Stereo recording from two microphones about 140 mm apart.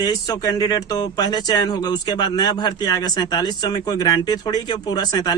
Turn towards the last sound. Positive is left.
turn(degrees=30)  # may be behind; listen again after turning